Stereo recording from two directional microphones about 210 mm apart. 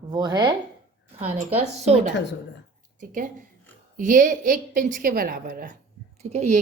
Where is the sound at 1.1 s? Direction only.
30° right (ahead or behind).